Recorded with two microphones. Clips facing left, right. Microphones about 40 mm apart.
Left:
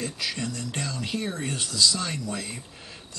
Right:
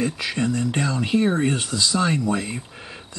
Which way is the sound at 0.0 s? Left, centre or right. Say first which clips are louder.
Right 7 dB; right.